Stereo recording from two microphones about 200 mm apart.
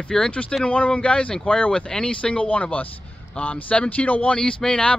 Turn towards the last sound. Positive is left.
turn(degrees=5)  # may be behind; listen again after turning